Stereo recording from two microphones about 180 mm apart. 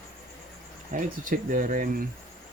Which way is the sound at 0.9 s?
45° right (ahead or behind).